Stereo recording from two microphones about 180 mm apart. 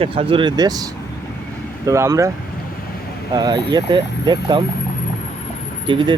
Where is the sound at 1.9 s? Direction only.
15° right (ahead or behind).